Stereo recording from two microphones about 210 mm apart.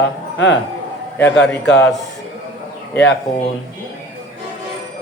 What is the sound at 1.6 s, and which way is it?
Speech, 55° left (ahead or behind).